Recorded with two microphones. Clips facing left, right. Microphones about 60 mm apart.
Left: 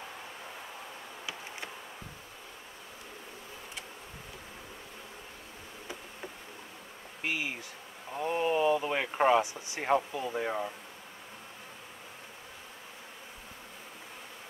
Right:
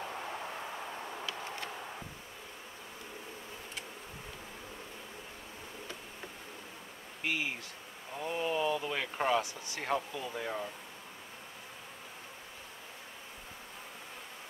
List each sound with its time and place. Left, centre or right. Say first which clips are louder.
7.2 s bee: left 1 dB; centre
8.1 s speech: left 5 dB; left